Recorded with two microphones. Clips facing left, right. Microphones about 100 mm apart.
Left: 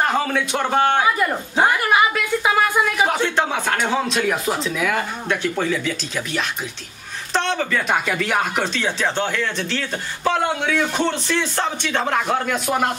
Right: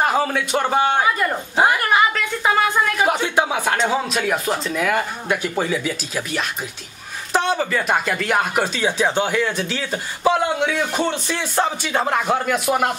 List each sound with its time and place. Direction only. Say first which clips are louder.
0.0 s speech: right 1 dB; 5° right (ahead or behind)
1.8 s a sound: even; 5° left (ahead or behind)
3.1 s speech: right 1 dB; 10° right (ahead or behind)